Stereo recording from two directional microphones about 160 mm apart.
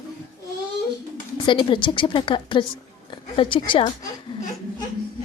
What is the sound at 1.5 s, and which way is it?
A woman's voice, 30° left (ahead or behind).